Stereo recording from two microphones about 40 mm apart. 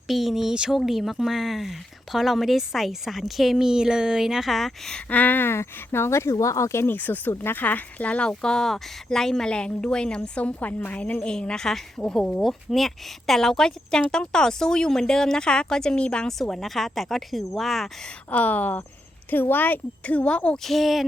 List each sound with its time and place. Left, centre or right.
0.1 s speech: centre
3.6 s a sound: centre
4.4 s speech: centre
5.0 s a woman's voice: left
5.4 s speech: left
6.8 s a woman's voice: left
8.3 s speech: centre
9.5 s a woman's voice: left
10.3 s a woman's voice: left
11.2 s a woman's voice: left
12.5 s speech: centre; by 16.2 s left
16.2 s speech: centre
18.3 s a woman's voice: left
20.7 s speech: centre